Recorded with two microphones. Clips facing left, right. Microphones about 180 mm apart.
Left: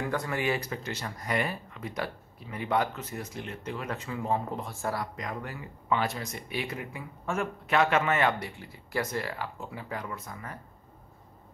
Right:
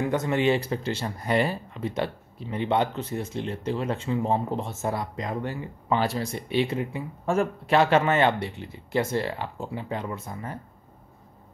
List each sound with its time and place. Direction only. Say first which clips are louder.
0.0 s speech: right 7 dB; 20° right (ahead or behind)